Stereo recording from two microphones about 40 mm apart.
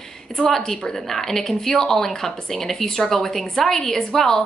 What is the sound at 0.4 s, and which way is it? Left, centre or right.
A woman's voice, centre.